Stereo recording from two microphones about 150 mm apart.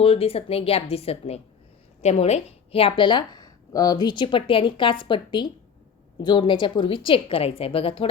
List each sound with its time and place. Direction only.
0.0 s a woman's voice: 40° left (ahead or behind)